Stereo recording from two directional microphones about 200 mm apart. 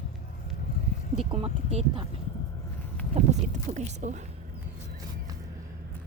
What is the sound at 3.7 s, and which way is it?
Speech, 35° right (ahead or behind).